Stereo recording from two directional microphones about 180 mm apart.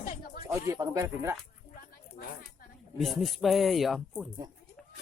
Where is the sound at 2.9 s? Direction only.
Centre (ahead or behind).